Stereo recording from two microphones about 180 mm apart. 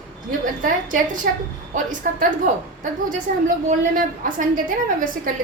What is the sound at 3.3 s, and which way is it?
A woman's voice, 50° right (ahead or behind).